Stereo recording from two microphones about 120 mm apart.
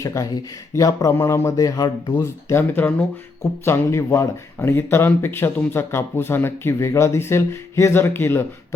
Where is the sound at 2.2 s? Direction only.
20° left (ahead or behind).